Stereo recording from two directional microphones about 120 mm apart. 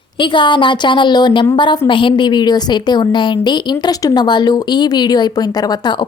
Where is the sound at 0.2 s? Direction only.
40° left (ahead or behind).